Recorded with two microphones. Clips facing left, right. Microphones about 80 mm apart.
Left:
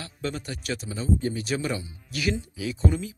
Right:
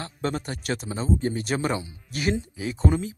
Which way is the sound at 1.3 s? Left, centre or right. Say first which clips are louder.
Right 2 dB; right.